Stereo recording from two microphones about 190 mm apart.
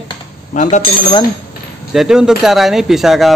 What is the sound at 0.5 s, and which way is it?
Speech, 40° left (ahead or behind).